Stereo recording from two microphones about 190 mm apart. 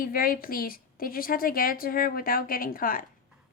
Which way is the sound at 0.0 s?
50° left (ahead or behind).